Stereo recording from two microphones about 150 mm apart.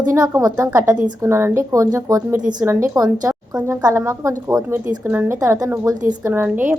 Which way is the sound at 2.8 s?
25° right (ahead or behind).